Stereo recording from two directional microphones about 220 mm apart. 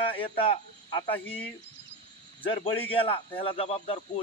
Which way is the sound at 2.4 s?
25° left (ahead or behind).